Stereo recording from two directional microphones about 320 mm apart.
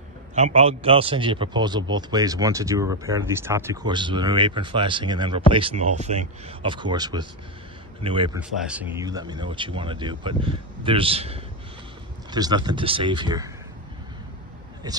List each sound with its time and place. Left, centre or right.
0.3 s a man's voice: right
8.4 s a man's voice: centre
14.8 s a man's voice: centre